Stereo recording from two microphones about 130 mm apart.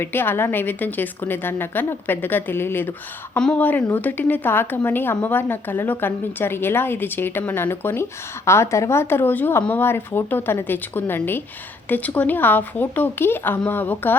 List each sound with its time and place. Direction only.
0.0 s a woman's voice: 15° left (ahead or behind)